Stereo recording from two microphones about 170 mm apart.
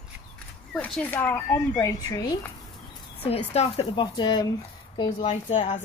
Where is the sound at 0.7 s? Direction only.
5° left (ahead or behind); by 2.5 s 20° left (ahead or behind).